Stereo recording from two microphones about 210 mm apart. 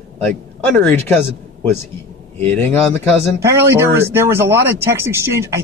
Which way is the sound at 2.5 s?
10° left (ahead or behind).